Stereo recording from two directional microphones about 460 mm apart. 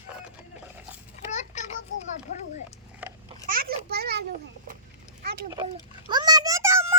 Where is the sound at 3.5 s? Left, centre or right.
Centre.